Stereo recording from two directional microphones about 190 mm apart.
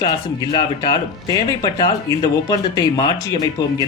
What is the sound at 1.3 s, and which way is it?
Speech, 20° left (ahead or behind).